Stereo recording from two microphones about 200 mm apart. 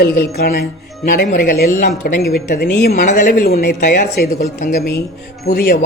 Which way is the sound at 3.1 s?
50° left (ahead or behind).